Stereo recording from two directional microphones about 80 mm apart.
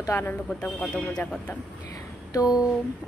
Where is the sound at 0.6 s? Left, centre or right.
Centre.